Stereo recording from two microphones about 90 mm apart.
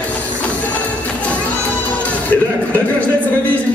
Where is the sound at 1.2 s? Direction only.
15° left (ahead or behind).